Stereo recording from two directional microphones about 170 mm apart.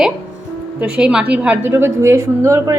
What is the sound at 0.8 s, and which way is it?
A woman's voice, 5° right (ahead or behind).